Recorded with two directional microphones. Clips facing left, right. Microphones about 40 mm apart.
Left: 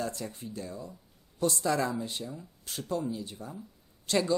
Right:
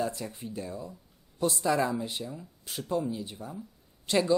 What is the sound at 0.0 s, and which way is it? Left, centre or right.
Speech, centre.